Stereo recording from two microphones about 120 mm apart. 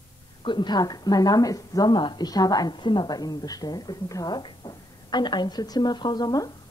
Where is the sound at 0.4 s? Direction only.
40° left (ahead or behind).